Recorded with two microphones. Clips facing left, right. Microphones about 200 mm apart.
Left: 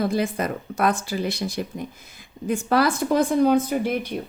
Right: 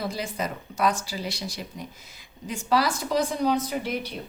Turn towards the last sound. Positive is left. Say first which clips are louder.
# left 6 dB
turn(degrees=50)  # may be behind; listen again after turning